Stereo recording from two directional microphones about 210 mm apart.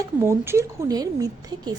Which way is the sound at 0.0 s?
10° right (ahead or behind).